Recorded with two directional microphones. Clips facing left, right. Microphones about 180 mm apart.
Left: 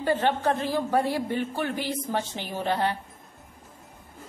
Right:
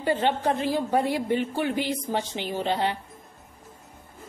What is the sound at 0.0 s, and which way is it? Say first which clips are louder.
A woman's voice: even; 15° right (ahead or behind).